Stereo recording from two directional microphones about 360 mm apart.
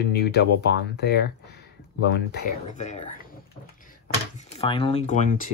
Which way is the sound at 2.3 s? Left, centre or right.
Left.